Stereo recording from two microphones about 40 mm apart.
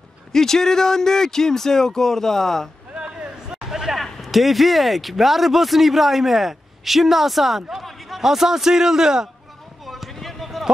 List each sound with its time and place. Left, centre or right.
0.3 s speech: centre
2.9 s a sound: right
3.9 s a man's voice: centre
10.1 s basketball bounce: centre